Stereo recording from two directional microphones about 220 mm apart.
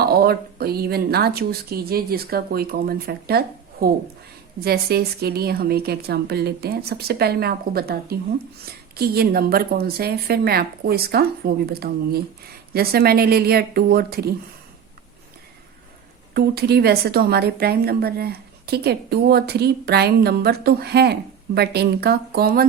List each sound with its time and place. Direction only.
0.0 s a woman's voice: 45° right (ahead or behind)
16.3 s a woman's voice: 45° right (ahead or behind)